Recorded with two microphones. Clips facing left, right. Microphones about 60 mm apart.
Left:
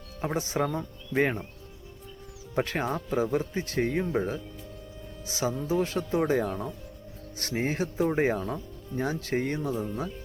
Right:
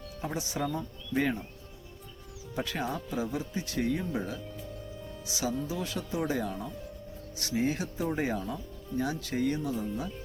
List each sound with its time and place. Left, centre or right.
0.2 s speech: left
2.6 s speech: left